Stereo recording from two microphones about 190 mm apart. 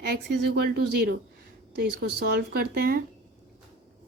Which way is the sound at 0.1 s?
55° right (ahead or behind).